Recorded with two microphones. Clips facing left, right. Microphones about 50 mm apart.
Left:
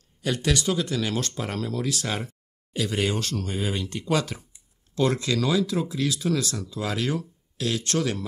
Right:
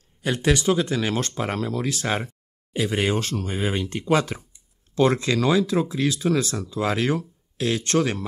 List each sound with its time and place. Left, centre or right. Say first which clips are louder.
0.2 s speech: right 3 dB; right